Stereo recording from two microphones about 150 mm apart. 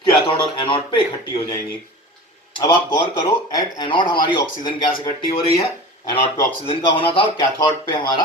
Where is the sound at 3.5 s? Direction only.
25° left (ahead or behind).